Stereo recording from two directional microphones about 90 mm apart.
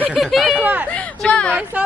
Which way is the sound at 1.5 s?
20° right (ahead or behind).